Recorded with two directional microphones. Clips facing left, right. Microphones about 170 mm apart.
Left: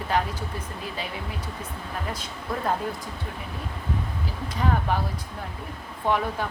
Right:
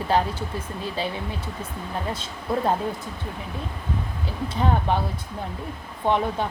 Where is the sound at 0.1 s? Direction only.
30° right (ahead or behind).